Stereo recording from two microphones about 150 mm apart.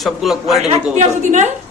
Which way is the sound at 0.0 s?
Centre (ahead or behind).